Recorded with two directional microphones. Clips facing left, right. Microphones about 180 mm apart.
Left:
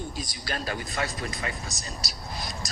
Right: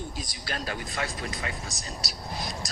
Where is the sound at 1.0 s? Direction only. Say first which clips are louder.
Left 2 dB; 40° left (ahead or behind).